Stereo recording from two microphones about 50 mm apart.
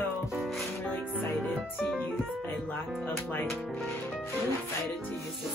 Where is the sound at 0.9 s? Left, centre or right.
Left.